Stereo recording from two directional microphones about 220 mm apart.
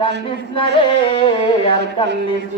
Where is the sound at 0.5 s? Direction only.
25° left (ahead or behind).